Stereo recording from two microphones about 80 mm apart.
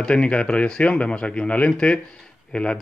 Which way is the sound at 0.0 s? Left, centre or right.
Centre.